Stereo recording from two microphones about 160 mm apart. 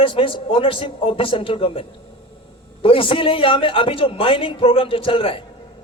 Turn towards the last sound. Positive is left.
turn(degrees=35)  # may be behind; listen again after turning